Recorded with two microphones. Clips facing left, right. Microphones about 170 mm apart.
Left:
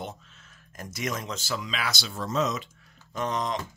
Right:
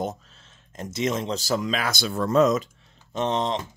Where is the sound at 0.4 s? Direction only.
25° right (ahead or behind); by 2.7 s 50° right (ahead or behind).